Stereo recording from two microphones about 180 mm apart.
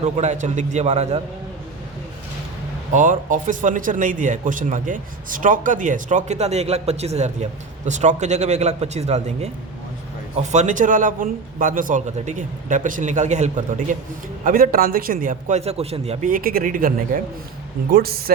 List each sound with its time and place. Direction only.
0.0 s a man's voice: 40° right (ahead or behind)
2.9 s a man's voice: 45° right (ahead or behind)
16.3 s a man's voice: 55° right (ahead or behind)